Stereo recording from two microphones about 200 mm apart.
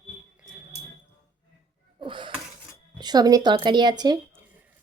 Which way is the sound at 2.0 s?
25° right (ahead or behind).